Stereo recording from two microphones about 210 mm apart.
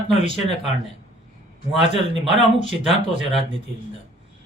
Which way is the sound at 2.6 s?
25° right (ahead or behind).